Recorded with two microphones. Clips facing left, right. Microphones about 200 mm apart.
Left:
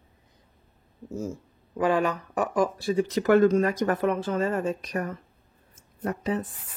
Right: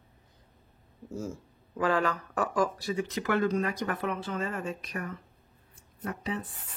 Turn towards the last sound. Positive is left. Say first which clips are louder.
# left 6 dB
turn(degrees=45)  # may be behind; listen again after turning